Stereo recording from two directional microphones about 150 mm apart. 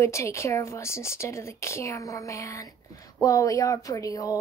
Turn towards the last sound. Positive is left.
turn(degrees=20)  # may be behind; listen again after turning